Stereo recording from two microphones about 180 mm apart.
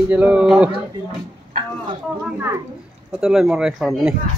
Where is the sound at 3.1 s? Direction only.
5° right (ahead or behind).